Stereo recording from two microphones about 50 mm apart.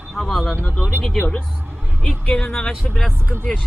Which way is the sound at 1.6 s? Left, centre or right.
Right.